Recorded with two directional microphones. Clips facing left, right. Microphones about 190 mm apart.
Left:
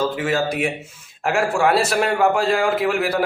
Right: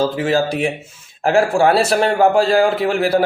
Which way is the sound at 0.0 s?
30° right (ahead or behind).